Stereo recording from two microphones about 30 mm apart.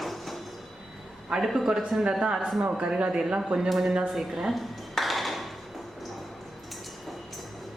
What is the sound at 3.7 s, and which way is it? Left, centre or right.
Speech, centre.